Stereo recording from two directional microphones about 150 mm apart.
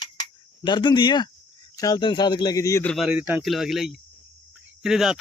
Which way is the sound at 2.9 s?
Centre (ahead or behind).